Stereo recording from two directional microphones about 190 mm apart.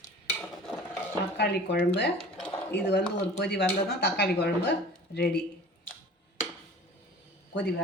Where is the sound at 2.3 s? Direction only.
5° left (ahead or behind).